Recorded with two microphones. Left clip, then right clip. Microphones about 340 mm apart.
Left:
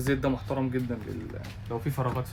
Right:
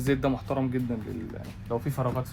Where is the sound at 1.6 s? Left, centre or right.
Centre.